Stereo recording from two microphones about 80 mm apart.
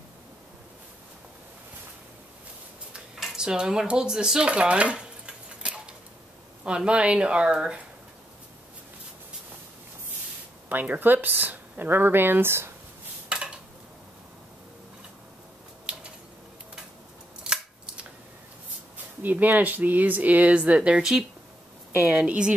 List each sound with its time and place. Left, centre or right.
2.9 s dishes: centre
6.6 s speech: centre
10.7 s speech: right
17.4 s scissors: centre
19.2 s speech: right